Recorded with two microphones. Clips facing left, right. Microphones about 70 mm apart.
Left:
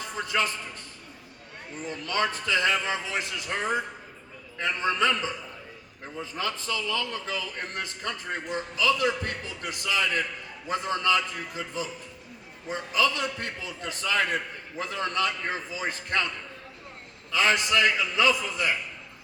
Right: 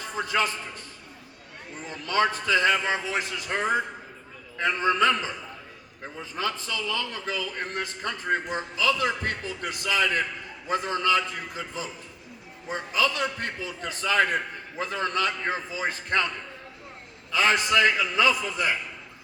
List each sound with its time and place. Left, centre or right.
0.0 s a man's voice: right
1.9 s a man's voice: right
6.7 s a man's voice: right
17.3 s a man's voice: right